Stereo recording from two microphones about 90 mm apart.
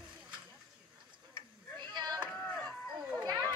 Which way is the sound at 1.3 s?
60° right (ahead or behind).